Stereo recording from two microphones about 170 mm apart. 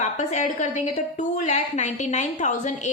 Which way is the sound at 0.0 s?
45° left (ahead or behind).